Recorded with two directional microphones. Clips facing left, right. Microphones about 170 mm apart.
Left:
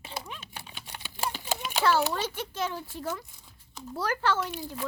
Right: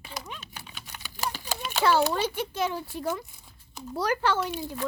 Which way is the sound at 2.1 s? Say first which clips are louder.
Right 4 dB; 15° right (ahead or behind).